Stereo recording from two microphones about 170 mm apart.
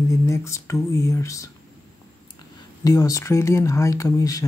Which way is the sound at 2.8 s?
20° left (ahead or behind).